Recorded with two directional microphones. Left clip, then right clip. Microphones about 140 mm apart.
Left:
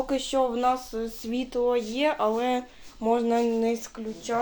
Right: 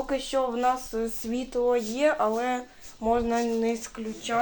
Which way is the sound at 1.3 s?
20° left (ahead or behind).